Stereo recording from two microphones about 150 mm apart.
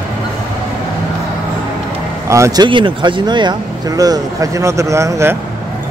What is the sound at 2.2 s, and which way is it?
Speech, 20° right (ahead or behind).